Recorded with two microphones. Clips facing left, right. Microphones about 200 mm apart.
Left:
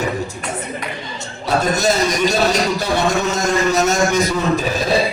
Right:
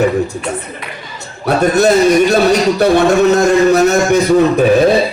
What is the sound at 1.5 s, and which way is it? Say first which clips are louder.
A man's voice: right 7 dB; 60° right (ahead or behind).